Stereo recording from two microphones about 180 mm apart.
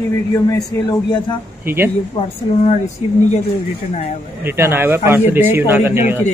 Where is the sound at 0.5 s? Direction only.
20° left (ahead or behind).